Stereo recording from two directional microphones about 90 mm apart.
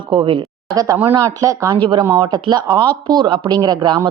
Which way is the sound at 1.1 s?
40° right (ahead or behind).